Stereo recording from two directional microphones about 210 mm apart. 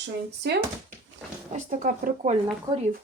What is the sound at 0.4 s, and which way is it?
Speech, 50° right (ahead or behind).